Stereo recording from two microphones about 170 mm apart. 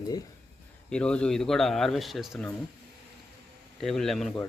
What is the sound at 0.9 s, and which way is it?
A man's voice, 5° left (ahead or behind).